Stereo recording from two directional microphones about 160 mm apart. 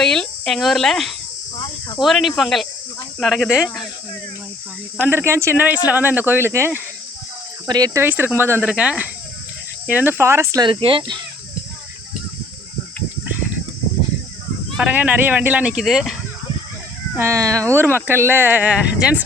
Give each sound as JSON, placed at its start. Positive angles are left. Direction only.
{"t": 0.0, "sound": "speech", "side_deg": 5}
{"t": 1.5, "sound": "snake", "side_deg": 30}
{"t": 2.0, "sound": "speech", "side_deg": 0}
{"t": 4.9, "sound": "speech", "side_deg": -15}
{"t": 8.0, "sound": "speech", "side_deg": -10}
{"t": 10.7, "sound": "speech", "side_deg": -35}
{"t": 14.8, "sound": "speech", "side_deg": -10}
{"t": 17.2, "sound": "speech", "side_deg": -15}
{"t": 17.6, "sound": "speech", "side_deg": 10}
{"t": 17.9, "sound": "speech", "side_deg": -15}